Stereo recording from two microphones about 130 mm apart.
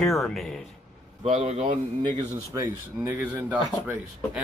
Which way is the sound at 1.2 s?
50° right (ahead or behind).